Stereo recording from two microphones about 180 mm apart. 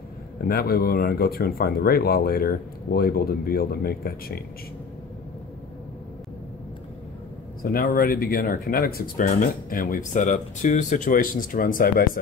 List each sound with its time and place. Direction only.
0.5 s speech: 55° left (ahead or behind)
7.6 s speech: 55° left (ahead or behind)